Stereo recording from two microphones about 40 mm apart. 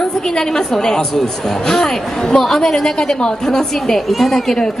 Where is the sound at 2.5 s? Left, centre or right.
Centre.